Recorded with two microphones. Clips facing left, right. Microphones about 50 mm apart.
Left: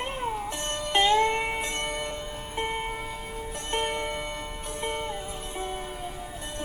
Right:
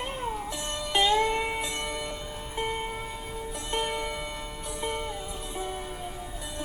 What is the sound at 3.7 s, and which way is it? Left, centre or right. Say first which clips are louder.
Music: left 1 dB; left.